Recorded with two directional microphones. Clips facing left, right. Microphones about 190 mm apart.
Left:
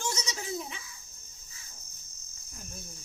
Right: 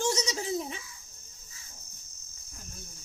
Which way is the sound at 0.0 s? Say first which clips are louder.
Right 6 dB; 35° right (ahead or behind).